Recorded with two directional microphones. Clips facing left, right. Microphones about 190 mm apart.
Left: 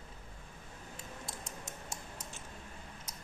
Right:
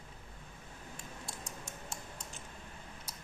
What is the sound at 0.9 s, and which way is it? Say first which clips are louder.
Typing: left 1 dB; 20° left (ahead or behind).